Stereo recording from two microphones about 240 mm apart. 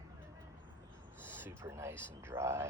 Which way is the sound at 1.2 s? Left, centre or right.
Centre.